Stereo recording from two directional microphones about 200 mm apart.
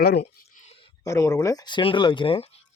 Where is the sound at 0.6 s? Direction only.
30° left (ahead or behind).